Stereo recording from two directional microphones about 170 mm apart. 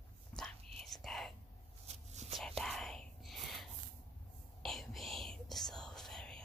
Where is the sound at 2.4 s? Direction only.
5° left (ahead or behind).